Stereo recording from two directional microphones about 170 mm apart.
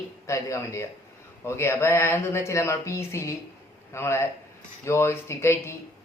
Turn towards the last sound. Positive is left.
turn(degrees=15)  # may be behind; listen again after turning